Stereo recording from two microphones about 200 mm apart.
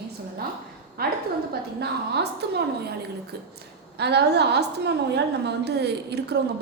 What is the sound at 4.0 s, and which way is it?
A woman's voice, 55° right (ahead or behind).